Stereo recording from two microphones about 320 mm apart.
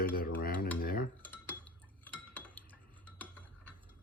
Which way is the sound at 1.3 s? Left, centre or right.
Centre.